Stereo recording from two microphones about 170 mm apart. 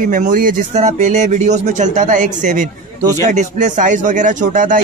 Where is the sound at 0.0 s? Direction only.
50° right (ahead or behind).